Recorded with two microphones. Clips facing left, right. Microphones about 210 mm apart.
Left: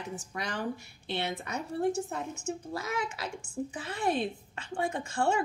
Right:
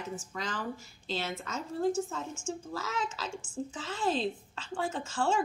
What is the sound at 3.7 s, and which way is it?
A woman's voice, 60° left (ahead or behind).